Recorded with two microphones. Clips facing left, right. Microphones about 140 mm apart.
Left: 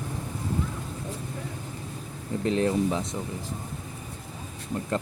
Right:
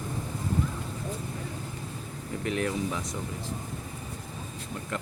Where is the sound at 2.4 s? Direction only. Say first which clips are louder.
Left 5 dB; 30° left (ahead or behind).